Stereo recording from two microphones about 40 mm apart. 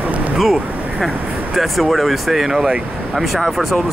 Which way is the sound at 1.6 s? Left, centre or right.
Centre.